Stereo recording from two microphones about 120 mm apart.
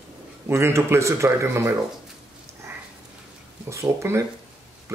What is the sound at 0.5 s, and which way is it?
Speech, 20° right (ahead or behind).